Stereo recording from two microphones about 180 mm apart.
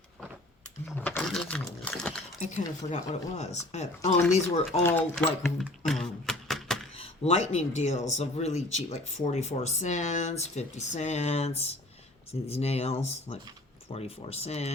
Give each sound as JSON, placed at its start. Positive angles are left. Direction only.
{"t": 0.9, "sound": "sewing machine", "side_deg": 10}
{"t": 2.4, "sound": "speech", "side_deg": 40}
{"t": 4.8, "sound": "speech", "side_deg": 10}
{"t": 6.9, "sound": "speech", "side_deg": 35}